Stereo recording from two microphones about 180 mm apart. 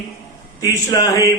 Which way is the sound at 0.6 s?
20° left (ahead or behind).